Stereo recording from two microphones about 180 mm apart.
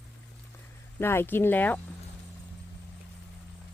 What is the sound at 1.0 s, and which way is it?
Speech, 15° left (ahead or behind).